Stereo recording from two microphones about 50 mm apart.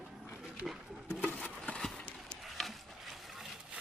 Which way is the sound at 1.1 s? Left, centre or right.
Left.